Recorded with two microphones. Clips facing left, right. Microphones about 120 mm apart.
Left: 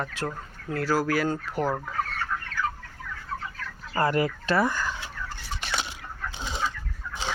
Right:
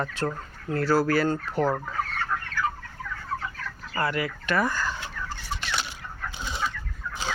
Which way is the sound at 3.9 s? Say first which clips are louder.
Left 4 dB; 40° left (ahead or behind).